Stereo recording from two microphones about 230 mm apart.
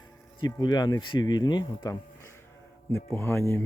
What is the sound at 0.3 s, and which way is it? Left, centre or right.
Speech, centre.